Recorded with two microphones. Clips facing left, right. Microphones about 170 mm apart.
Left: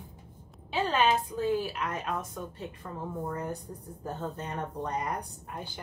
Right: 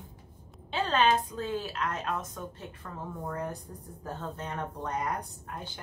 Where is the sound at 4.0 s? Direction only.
20° left (ahead or behind).